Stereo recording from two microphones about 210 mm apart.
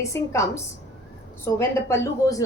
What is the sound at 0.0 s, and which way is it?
A woman's voice, 15° left (ahead or behind).